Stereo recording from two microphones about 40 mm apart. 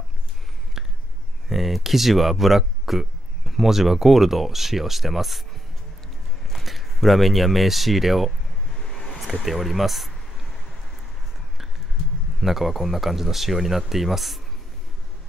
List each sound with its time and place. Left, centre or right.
0.8 s a sound: centre
1.5 s speech: centre
6.4 s speech: centre
12.4 s speech: centre